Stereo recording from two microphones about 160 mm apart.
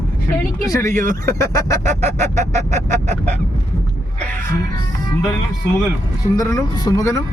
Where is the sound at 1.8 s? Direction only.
50° right (ahead or behind).